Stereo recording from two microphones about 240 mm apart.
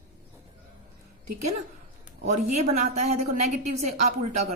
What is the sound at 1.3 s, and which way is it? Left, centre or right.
Speech, right.